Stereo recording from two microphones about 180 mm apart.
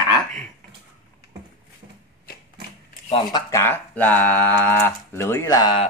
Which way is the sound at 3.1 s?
25° left (ahead or behind).